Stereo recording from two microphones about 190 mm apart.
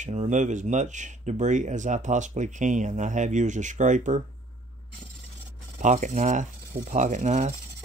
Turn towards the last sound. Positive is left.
turn(degrees=-40)  # may be behind; listen again after turning